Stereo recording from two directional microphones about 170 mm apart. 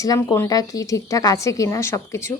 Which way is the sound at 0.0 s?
20° left (ahead or behind).